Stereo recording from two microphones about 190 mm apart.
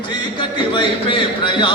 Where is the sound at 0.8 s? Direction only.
25° left (ahead or behind).